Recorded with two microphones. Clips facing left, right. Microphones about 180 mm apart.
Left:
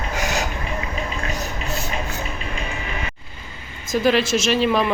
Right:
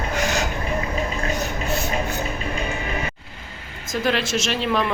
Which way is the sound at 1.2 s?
35° right (ahead or behind).